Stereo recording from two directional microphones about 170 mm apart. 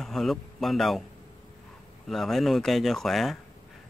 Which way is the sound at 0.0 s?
Centre (ahead or behind).